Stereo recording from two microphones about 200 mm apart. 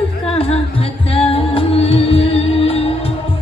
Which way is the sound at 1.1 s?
30° left (ahead or behind).